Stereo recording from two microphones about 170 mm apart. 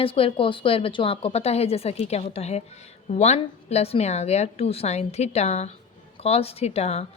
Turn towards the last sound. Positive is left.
turn(degrees=40)  # may be behind; listen again after turning